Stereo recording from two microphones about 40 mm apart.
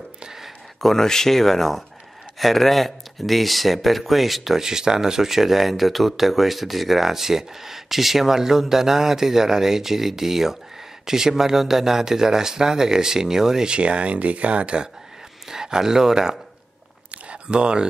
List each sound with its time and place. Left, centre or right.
0.2 s a sound: centre
0.7 s speech: centre
4.6 s speech: centre
13.7 s speech: right
15.4 s speech: centre
17.1 s a sound: right